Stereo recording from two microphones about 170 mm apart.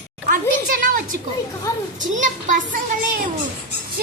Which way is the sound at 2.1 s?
50° right (ahead or behind).